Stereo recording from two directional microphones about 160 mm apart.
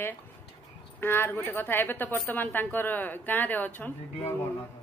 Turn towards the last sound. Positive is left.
turn(degrees=10)  # may be behind; listen again after turning